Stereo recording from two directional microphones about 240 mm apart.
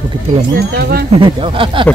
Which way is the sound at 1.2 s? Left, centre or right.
Right.